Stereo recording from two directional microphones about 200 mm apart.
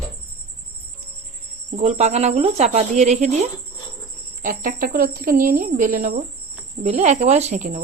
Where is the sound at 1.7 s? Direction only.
35° right (ahead or behind).